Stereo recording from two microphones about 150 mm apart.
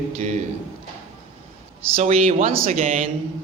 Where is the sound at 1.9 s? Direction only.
45° right (ahead or behind).